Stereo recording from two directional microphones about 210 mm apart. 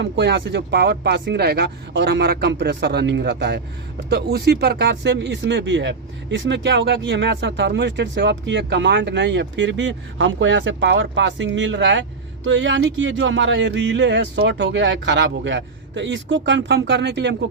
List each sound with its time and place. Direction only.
0.0 s speech: 55° right (ahead or behind)